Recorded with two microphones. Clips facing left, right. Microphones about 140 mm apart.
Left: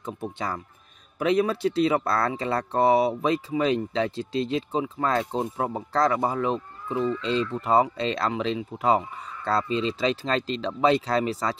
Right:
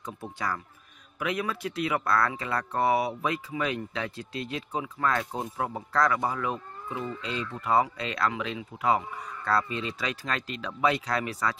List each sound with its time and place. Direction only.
0.0 s speech: 25° left (ahead or behind)